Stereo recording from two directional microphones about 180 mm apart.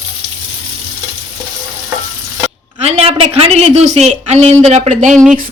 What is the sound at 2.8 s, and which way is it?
A woman's voice, 35° right (ahead or behind).